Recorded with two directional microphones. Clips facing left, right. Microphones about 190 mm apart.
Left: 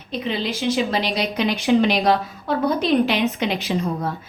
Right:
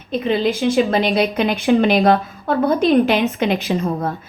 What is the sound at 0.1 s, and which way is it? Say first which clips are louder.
A woman's voice: right 7 dB; 50° right (ahead or behind).